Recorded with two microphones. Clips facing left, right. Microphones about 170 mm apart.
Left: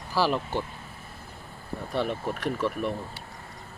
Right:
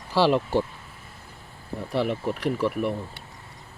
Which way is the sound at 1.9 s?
85° right.